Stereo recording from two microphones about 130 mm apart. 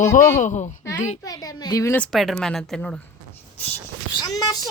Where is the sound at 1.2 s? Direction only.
30° left (ahead or behind).